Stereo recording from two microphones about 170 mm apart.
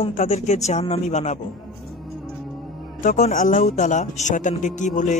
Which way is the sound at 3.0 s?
45° left (ahead or behind).